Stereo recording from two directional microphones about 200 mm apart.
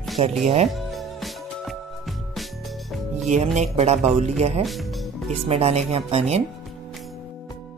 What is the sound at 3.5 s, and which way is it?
Speech, 35° right (ahead or behind).